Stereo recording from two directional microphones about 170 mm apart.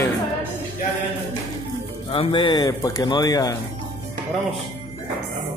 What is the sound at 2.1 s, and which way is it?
Speech, 30° left (ahead or behind).